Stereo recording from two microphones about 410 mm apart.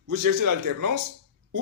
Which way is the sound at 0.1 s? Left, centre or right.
Right.